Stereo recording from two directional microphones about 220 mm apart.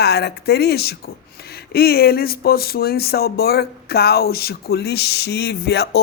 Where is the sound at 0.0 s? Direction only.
45° left (ahead or behind).